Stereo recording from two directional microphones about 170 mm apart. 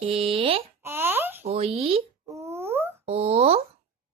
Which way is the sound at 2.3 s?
15° right (ahead or behind).